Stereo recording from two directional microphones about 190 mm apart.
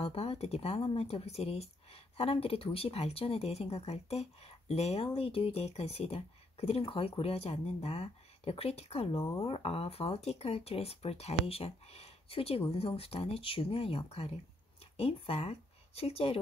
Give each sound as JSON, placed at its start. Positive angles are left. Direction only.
{"t": 0.0, "sound": "speech", "side_deg": 30}
{"t": 9.3, "sound": "speech", "side_deg": 20}
{"t": 9.6, "sound": "speech", "side_deg": 30}